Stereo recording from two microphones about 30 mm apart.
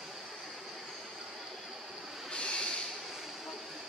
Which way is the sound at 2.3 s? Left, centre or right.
Left.